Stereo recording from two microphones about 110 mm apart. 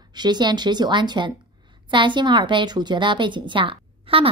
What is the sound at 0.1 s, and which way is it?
A woman's voice, 40° right (ahead or behind).